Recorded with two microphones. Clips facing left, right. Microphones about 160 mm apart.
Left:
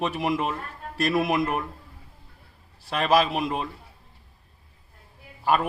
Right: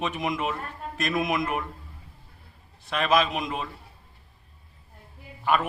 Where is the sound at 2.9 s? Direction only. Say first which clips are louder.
Left 2 dB; 35° left (ahead or behind).